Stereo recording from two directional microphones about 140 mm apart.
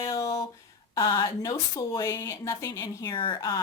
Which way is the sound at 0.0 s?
25° left (ahead or behind).